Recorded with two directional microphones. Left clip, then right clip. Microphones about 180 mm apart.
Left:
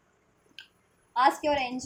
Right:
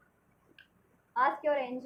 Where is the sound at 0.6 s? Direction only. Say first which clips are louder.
Left 11 dB; 40° left (ahead or behind).